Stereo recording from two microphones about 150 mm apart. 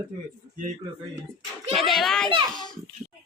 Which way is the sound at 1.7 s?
Centre (ahead or behind).